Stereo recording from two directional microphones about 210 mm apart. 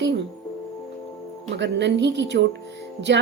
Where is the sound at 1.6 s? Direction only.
55° right (ahead or behind).